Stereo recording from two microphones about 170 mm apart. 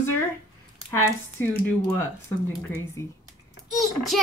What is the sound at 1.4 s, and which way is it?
A woman's voice, 15° left (ahead or behind).